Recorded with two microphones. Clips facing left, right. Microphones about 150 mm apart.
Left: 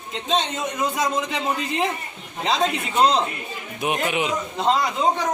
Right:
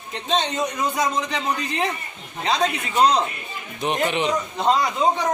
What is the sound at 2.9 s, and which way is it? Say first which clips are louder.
Speech: right 1 dB; 15° right (ahead or behind).